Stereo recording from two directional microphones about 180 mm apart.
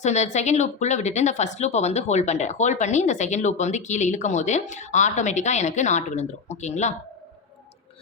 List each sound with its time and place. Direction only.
0.0 s speech: 40° left (ahead or behind)